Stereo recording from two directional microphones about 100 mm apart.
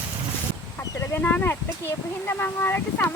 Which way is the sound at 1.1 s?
20° left (ahead or behind).